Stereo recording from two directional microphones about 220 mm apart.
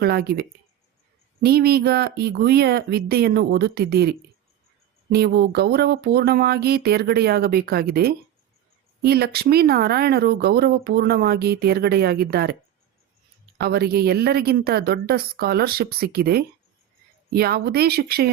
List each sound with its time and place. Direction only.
0.0 s speech: 45° right (ahead or behind)
5.1 s speech: 45° right (ahead or behind)
13.6 s speech: 45° right (ahead or behind)